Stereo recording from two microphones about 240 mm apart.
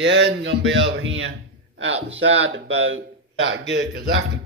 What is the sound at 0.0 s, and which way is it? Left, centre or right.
Speech, right.